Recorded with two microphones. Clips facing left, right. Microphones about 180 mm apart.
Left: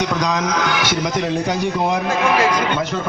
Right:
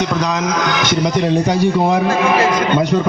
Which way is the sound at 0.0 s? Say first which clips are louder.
Right 2 dB; 15° left (ahead or behind).